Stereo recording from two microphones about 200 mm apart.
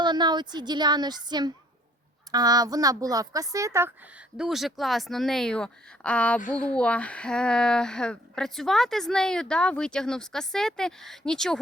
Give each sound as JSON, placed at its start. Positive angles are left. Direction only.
{"t": 0.0, "sound": "a woman's voice", "side_deg": -20}
{"t": 4.4, "sound": "speech", "side_deg": 0}